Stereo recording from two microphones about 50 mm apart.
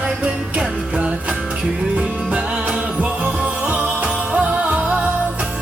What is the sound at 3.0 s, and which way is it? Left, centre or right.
Music, right.